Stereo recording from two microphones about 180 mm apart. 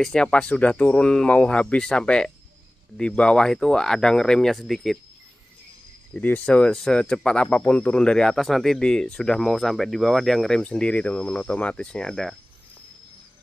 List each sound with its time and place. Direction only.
0.0 s speech: 5° left (ahead or behind)
6.1 s speech: 5° left (ahead or behind)